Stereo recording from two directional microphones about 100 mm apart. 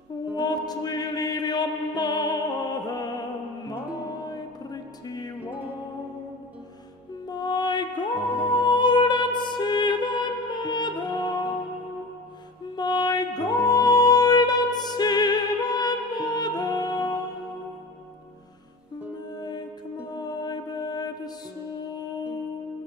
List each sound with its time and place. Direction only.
0.4 s chant: 45° left (ahead or behind)
4.3 s music: 40° left (ahead or behind)
5.4 s music: 15° right (ahead or behind)
7.2 s music: 45° left (ahead or behind)
12.7 s music: 45° left (ahead or behind)
19.3 s mantra: 45° left (ahead or behind)
20.1 s music: 45° left (ahead or behind)